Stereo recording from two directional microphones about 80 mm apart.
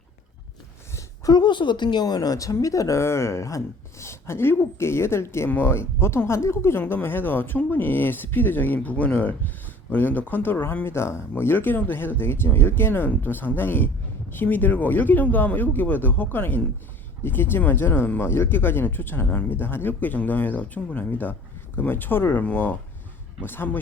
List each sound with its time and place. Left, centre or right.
1.3 s speech: left
22.4 s speech: centre